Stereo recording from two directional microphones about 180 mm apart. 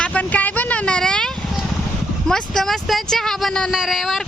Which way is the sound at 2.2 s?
Centre (ahead or behind).